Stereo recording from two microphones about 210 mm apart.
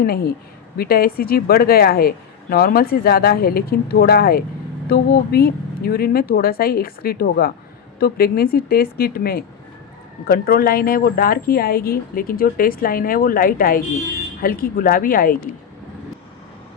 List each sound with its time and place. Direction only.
0.0 s speech: 45° left (ahead or behind)